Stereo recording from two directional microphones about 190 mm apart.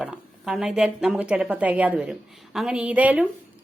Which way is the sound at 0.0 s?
5° right (ahead or behind).